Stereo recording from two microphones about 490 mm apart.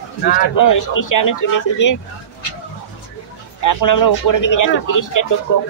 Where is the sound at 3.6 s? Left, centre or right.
Left.